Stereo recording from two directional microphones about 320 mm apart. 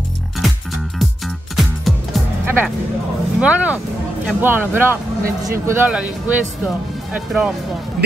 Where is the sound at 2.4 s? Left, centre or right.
Centre.